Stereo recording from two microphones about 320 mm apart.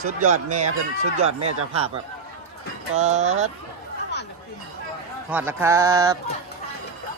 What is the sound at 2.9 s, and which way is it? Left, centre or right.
Speech, right.